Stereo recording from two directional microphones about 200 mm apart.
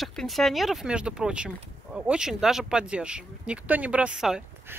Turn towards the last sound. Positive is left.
turn(degrees=-5)  # may be behind; listen again after turning